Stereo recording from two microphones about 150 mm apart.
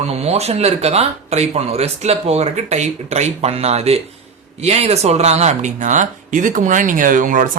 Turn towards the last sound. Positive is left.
turn(degrees=-60)  # may be behind; listen again after turning